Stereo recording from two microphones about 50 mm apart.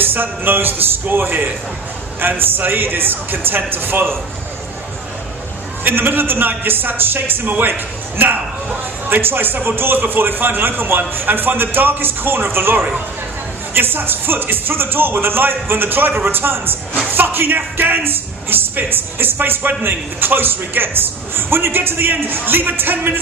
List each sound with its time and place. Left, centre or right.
0.0 s speech: right
5.8 s speech: right